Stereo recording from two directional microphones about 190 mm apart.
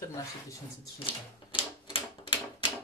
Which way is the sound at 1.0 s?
30° left (ahead or behind).